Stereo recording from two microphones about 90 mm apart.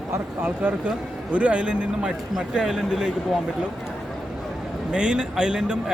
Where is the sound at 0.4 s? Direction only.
20° right (ahead or behind).